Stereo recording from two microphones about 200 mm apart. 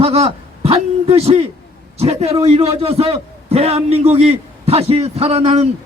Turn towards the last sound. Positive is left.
turn(degrees=-30)  # may be behind; listen again after turning